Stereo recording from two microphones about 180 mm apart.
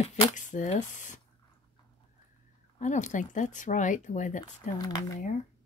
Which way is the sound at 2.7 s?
40° left (ahead or behind).